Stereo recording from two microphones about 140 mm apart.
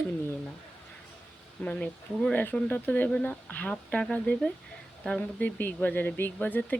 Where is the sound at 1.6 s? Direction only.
10° left (ahead or behind).